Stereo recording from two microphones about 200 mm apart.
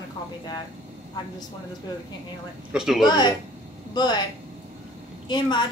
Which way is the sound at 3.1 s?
20° left (ahead or behind).